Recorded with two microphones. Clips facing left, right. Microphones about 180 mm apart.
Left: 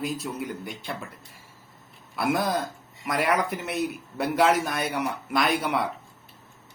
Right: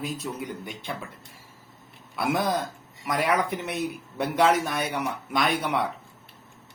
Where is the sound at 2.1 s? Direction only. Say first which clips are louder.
Even; 5° left (ahead or behind).